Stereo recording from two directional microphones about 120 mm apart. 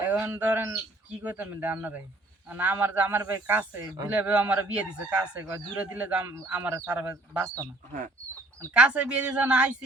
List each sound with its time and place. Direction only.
0.0 s speech: 15° right (ahead or behind)
8.7 s speech: 10° right (ahead or behind)